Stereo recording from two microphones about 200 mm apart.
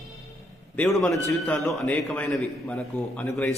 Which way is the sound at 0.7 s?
Centre (ahead or behind).